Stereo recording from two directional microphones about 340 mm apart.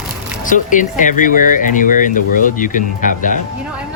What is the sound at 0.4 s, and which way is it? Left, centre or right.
Speech, left.